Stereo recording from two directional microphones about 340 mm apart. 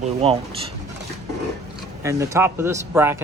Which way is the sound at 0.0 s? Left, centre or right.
Centre.